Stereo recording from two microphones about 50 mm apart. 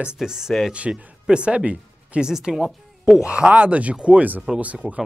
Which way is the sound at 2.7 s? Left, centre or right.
Centre.